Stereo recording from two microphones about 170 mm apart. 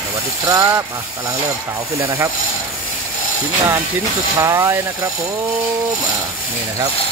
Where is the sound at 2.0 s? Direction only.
20° right (ahead or behind).